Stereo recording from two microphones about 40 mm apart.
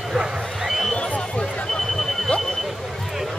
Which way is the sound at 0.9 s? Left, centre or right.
Left.